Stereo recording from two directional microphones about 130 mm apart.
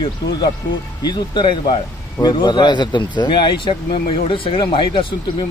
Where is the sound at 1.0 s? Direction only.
35° left (ahead or behind).